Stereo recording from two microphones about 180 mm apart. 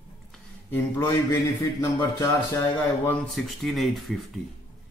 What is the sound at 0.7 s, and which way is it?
A man's voice, 15° left (ahead or behind).